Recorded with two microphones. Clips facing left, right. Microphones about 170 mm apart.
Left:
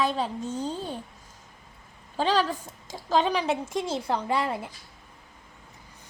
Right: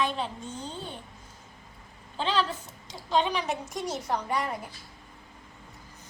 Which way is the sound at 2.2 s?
40° left (ahead or behind).